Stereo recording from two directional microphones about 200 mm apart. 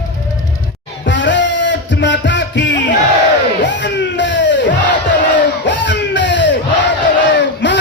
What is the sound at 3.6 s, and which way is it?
Crowd, 60° left (ahead or behind).